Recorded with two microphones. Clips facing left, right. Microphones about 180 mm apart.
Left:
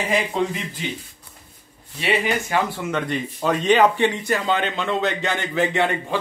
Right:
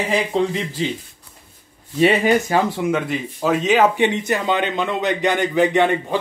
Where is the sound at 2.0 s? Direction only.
45° right (ahead or behind).